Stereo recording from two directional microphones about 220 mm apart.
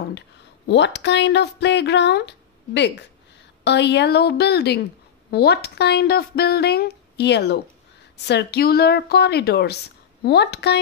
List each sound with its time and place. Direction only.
0.7 s speech: 55° left (ahead or behind)